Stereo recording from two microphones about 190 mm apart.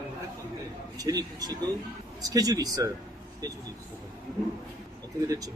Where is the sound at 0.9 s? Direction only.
20° right (ahead or behind).